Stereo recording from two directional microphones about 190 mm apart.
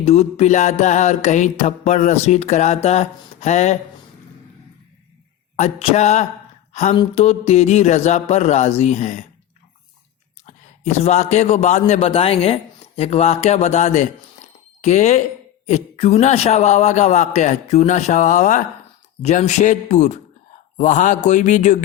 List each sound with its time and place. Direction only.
0.0 s music: 35° left (ahead or behind)
5.5 s music: 35° left (ahead or behind)
6.7 s speech: 35° left (ahead or behind)
7.0 s music: 35° left (ahead or behind)
10.4 s a man's voice: 35° left (ahead or behind)
13.0 s music: 35° left (ahead or behind)
14.8 s speech: 40° left (ahead or behind)
15.6 s music: 35° left (ahead or behind)